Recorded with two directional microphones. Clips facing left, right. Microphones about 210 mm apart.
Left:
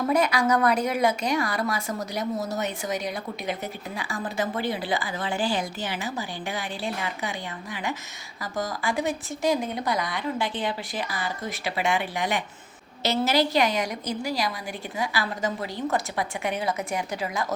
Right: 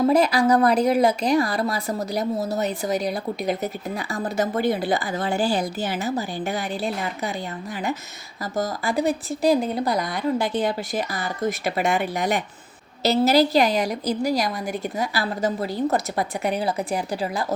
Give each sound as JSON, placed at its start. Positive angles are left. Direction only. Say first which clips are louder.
{"t": 0.0, "sound": "speech", "louder": "right 5 dB", "side_deg": -30}
{"t": 8.5, "sound": "speech", "louder": "right 4 dB", "side_deg": -40}